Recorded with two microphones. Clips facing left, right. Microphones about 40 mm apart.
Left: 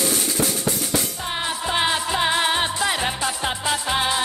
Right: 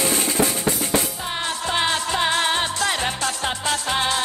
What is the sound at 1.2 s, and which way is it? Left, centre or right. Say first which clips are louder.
Music: even; centre.